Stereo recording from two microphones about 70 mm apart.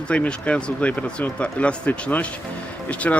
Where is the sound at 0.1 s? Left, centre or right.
Centre.